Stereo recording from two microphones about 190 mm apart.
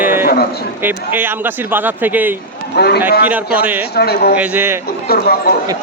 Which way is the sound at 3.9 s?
55° left (ahead or behind).